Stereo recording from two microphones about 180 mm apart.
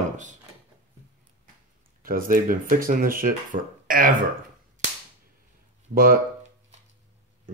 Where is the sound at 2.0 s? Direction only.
50° right (ahead or behind).